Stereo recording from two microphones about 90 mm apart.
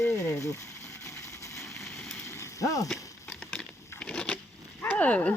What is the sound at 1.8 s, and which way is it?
Vehicle, 10° left (ahead or behind).